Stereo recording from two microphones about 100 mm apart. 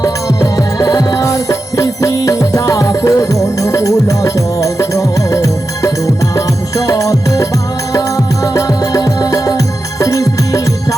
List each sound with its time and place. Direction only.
0.0 s music: 40° left (ahead or behind)